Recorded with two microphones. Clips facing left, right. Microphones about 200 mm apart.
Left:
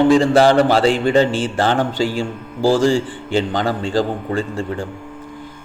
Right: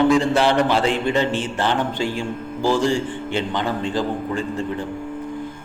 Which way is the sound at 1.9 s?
30° left (ahead or behind).